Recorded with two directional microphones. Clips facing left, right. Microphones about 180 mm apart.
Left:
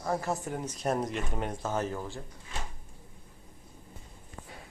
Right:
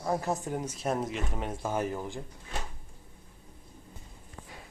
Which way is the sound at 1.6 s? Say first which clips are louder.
Right 3 dB; 10° right (ahead or behind).